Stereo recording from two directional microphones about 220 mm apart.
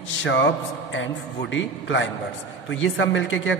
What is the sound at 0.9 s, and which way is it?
A man's voice, 60° left (ahead or behind).